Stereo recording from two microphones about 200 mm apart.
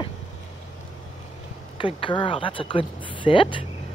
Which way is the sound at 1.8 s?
25° left (ahead or behind).